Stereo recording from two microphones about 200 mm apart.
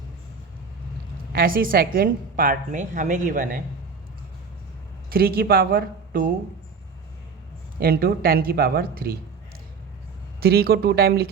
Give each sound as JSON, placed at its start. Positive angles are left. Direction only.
{"t": 1.3, "sound": "a woman's voice", "side_deg": -45}
{"t": 5.0, "sound": "a woman's voice", "side_deg": -50}
{"t": 7.8, "sound": "a woman's voice", "side_deg": -45}
{"t": 10.4, "sound": "a woman's voice", "side_deg": -50}